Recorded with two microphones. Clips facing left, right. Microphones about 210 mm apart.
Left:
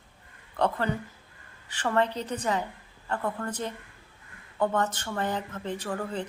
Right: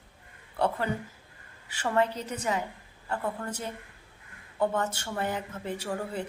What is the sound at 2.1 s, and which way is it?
Speech, 35° left (ahead or behind).